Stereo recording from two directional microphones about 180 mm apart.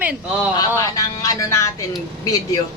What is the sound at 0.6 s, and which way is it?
Speech, 20° left (ahead or behind).